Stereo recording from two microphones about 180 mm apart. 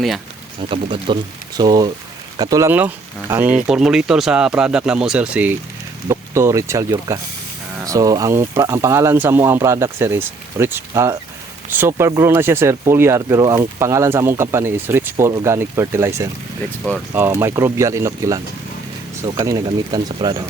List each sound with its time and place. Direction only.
0.7 s speech: 30° right (ahead or behind)